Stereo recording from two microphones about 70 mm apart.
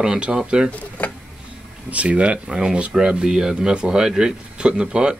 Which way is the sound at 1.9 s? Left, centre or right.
Centre.